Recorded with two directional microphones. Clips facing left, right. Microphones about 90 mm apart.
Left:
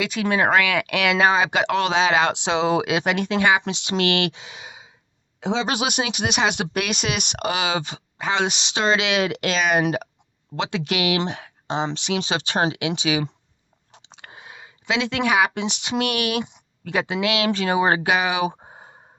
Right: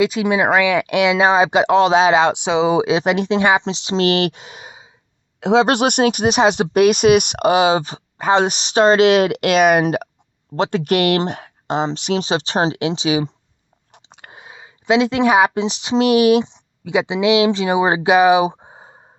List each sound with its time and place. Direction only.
0.0 s speech: 30° right (ahead or behind)
0.3 s speech: 15° right (ahead or behind); by 2.1 s 35° right (ahead or behind)
2.1 s speech: 15° right (ahead or behind)
2.8 s speech: 30° right (ahead or behind)
4.3 s a sound: 45° right (ahead or behind)
5.4 s speech: 70° right (ahead or behind); by 6.2 s 50° right (ahead or behind)
6.2 s speech: 40° right (ahead or behind)
14.2 s a sound: 40° right (ahead or behind)
14.4 s a sound: 20° right (ahead or behind)
14.8 s speech: 35° right (ahead or behind)
16.8 s speech: 15° right (ahead or behind)
18.1 s speech: 35° right (ahead or behind)